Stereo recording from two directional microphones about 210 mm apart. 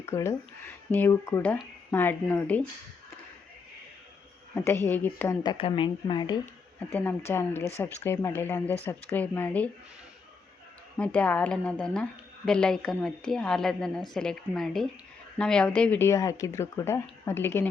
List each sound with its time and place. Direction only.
0.0 s speech: 10° left (ahead or behind)
4.6 s speech: 10° left (ahead or behind)
5.4 s speech: 25° left (ahead or behind)
6.7 s speech: 10° left (ahead or behind)
10.9 s a woman's voice: 5° left (ahead or behind)